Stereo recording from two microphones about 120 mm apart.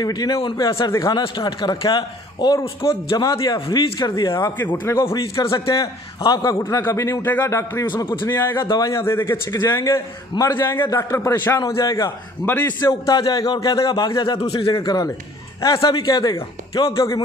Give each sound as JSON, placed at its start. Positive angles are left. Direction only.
{"t": 0.0, "sound": "a man's voice", "side_deg": 35}
{"t": 0.7, "sound": "a man's voice", "side_deg": 30}
{"t": 8.6, "sound": "a man's voice", "side_deg": 30}
{"t": 12.5, "sound": "a man's voice", "side_deg": 15}
{"t": 13.0, "sound": "a man's voice", "side_deg": 30}